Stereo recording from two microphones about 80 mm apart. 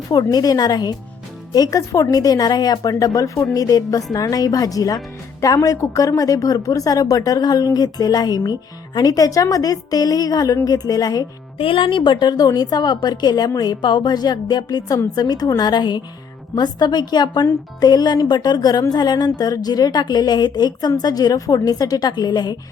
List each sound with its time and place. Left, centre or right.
0.1 s speech: left
11.7 s speech: left